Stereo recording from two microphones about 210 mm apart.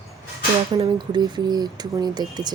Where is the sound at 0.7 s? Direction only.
20° right (ahead or behind).